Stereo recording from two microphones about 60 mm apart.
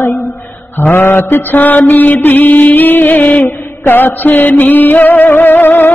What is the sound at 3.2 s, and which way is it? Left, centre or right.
Music, centre.